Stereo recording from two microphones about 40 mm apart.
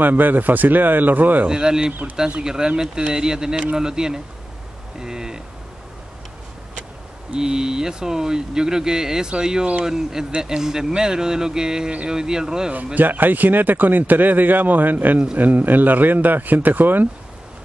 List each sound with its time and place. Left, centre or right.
0.0 s a man's voice: right
1.5 s speech: right
5.0 s a sound: centre
7.3 s speech: centre
12.7 s a man's voice: right